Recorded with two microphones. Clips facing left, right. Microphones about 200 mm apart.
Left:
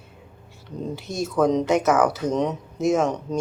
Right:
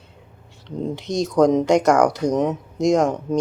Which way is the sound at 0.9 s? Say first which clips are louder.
Right 5 dB; 20° right (ahead or behind).